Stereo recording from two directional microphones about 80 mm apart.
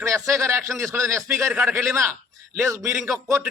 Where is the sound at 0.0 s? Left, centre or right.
Right.